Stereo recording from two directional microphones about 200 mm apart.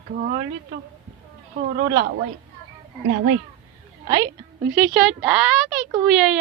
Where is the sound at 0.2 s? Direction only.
45° right (ahead or behind).